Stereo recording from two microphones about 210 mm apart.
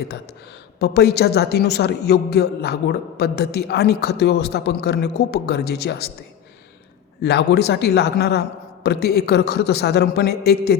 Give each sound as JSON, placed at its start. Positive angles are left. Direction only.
{"t": 0.8, "sound": "speech", "side_deg": 50}
{"t": 7.2, "sound": "speech", "side_deg": 50}